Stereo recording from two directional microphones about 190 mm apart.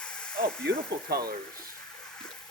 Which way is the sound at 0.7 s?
55° right (ahead or behind).